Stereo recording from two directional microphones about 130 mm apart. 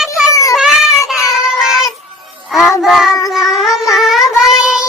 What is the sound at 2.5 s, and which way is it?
Child singing, centre (ahead or behind).